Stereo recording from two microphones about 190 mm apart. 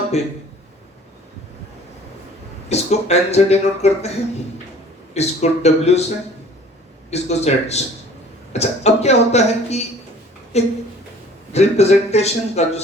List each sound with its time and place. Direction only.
2.6 s speech: 35° left (ahead or behind)
5.1 s speech: 35° left (ahead or behind)
7.1 s speech: 35° left (ahead or behind)